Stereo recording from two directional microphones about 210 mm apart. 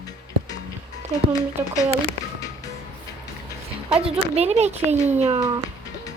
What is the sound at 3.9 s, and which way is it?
Speech, 30° right (ahead or behind).